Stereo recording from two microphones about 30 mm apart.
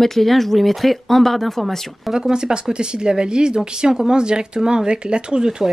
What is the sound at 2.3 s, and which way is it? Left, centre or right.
Speech, right.